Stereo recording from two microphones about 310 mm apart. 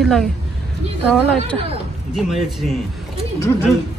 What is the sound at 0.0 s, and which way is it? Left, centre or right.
A woman's voice, centre.